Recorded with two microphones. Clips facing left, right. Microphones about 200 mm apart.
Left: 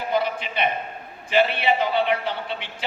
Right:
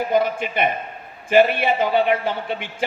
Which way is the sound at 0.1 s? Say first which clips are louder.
Right 1 dB; 50° right (ahead or behind).